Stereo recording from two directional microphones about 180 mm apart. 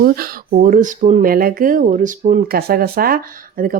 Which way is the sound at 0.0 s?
50° right (ahead or behind).